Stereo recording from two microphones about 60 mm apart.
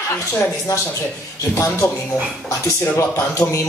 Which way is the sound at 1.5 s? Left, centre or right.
Left.